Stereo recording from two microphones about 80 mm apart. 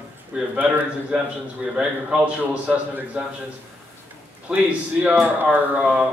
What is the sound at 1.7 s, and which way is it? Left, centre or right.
A man's voice, centre.